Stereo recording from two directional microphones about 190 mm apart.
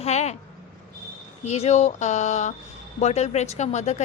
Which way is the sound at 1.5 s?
35° left (ahead or behind).